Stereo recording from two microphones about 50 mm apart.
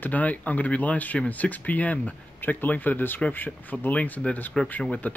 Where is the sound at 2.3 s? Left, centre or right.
Left.